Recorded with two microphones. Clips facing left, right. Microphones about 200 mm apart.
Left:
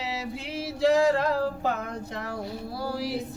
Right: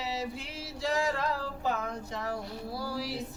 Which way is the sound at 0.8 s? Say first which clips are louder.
Left 9 dB; 65° left (ahead or behind).